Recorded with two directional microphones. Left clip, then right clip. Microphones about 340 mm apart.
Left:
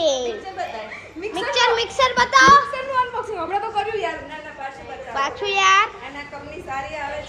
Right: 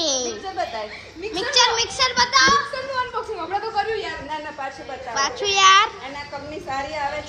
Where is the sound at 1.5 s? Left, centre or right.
Centre.